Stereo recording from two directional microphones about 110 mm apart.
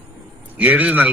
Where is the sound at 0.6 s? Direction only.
15° right (ahead or behind).